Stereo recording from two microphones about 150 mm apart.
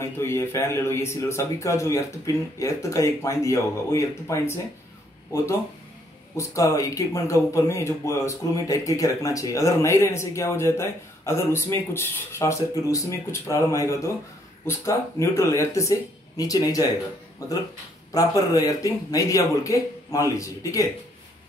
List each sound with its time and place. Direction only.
0.0 s speech: 15° left (ahead or behind)
6.3 s speech: 20° left (ahead or behind)